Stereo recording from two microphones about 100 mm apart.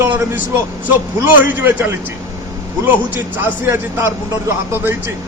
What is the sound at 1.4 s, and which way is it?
A man's voice, 20° right (ahead or behind).